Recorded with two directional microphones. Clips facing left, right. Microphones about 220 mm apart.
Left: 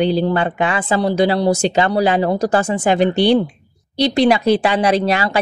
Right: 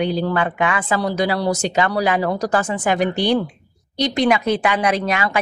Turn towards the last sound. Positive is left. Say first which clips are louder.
# left 4 dB
turn(degrees=30)  # may be behind; listen again after turning